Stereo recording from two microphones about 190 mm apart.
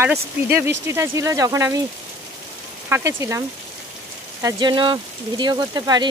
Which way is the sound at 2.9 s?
15° right (ahead or behind).